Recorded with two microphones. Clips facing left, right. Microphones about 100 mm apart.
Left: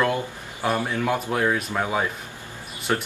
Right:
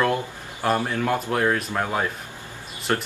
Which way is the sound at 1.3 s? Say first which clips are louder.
Right 1 dB; centre (ahead or behind).